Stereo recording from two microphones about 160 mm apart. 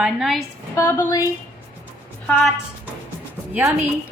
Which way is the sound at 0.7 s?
15° left (ahead or behind).